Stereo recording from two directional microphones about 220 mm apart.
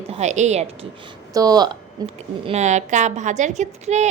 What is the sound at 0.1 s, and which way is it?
Speech, 30° right (ahead or behind).